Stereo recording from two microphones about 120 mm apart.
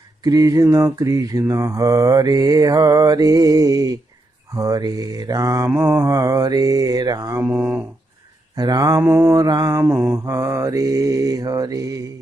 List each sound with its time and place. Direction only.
0.2 s mantra: 30° right (ahead or behind); by 7.9 s 15° right (ahead or behind)
8.5 s speech: 30° right (ahead or behind)
9.8 s mantra: 15° right (ahead or behind)